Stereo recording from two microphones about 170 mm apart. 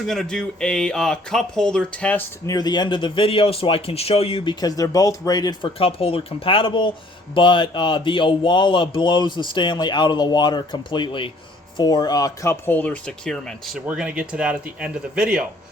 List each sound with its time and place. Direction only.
0.0 s speech: centre (ahead or behind)
2.5 s speech: 25° left (ahead or behind); by 15.4 s 5° right (ahead or behind)